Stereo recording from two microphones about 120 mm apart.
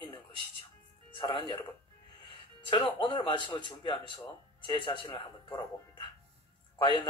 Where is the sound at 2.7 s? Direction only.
45° left (ahead or behind).